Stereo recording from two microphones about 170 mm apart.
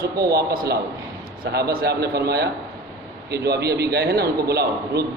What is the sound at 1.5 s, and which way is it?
A man's voice, 65° right (ahead or behind).